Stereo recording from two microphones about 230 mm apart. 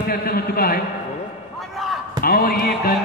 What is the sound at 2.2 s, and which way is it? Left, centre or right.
Speech, left.